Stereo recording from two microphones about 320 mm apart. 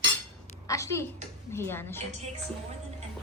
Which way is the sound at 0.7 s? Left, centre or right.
Centre.